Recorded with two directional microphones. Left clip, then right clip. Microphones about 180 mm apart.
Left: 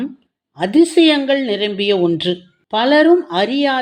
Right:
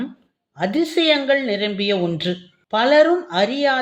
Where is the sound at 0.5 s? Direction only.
30° left (ahead or behind).